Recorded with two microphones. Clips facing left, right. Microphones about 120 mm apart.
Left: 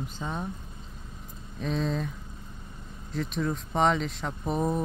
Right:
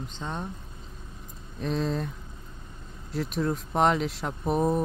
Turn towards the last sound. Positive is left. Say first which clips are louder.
# right 3 dB
turn(degrees=-5)  # may be behind; listen again after turning